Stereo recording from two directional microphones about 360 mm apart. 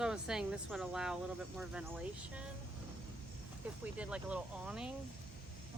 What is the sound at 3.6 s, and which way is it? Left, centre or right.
Speech, centre.